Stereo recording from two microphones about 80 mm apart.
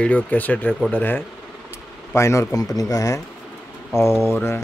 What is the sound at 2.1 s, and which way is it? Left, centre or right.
Speech, left.